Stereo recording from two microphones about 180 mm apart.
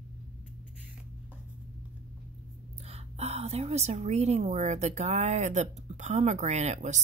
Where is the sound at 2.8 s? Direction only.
35° right (ahead or behind).